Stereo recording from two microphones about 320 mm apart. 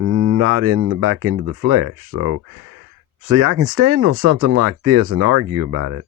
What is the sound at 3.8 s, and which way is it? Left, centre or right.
Speech, right.